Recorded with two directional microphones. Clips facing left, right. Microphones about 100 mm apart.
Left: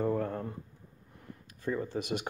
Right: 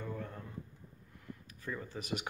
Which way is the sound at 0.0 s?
55° left (ahead or behind).